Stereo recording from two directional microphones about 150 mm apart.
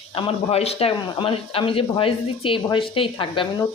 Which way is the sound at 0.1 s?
40° left (ahead or behind).